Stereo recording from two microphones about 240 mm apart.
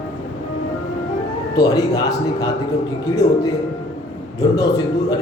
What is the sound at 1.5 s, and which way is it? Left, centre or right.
Speech, centre.